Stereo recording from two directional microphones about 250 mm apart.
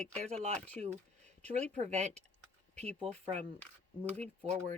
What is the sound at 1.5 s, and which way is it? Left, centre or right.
Speech, right.